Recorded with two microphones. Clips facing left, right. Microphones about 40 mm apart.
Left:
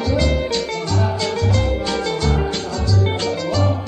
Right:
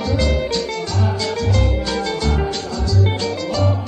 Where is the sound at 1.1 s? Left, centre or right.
Left.